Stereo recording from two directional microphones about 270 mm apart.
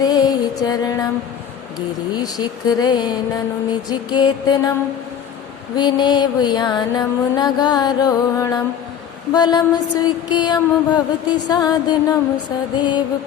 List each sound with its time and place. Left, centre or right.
0.0 s music: centre
2.1 s mantra: centre
5.7 s mantra: centre